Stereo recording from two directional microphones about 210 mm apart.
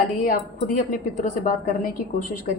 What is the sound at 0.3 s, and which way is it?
A woman's voice, 40° left (ahead or behind).